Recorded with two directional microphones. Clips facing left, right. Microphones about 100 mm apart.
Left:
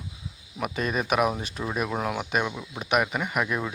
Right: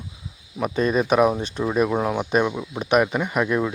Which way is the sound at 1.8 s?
10° right (ahead or behind).